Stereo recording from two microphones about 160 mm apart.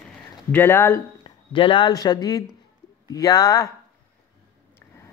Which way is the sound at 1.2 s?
30° left (ahead or behind).